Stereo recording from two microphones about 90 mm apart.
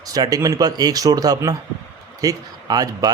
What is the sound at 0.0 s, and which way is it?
Speech, 40° right (ahead or behind).